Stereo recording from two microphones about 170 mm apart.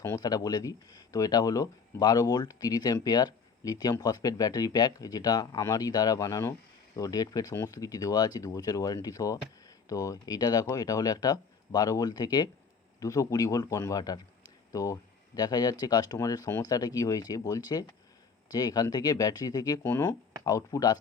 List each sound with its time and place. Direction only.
0.0 s speech: 20° left (ahead or behind)